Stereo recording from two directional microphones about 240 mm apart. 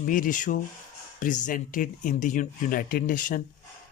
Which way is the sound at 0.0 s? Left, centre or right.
Left.